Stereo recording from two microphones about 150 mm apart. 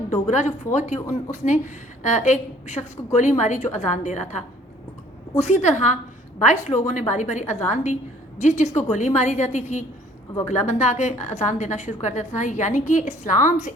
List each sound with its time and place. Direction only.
0.1 s a woman's voice: 50° left (ahead or behind)